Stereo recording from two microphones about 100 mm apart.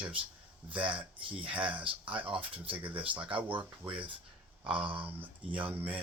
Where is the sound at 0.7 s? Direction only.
15° right (ahead or behind).